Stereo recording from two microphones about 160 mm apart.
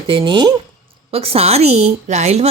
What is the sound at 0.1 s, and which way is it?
A woman's voice, 30° right (ahead or behind).